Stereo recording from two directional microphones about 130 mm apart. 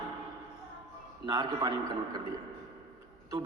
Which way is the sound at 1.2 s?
30° right (ahead or behind).